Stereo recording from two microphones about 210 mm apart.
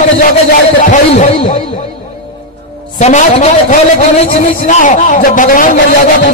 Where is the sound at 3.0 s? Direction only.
35° left (ahead or behind).